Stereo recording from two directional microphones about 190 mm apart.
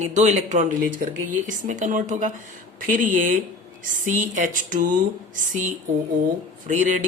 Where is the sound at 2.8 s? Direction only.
45° right (ahead or behind).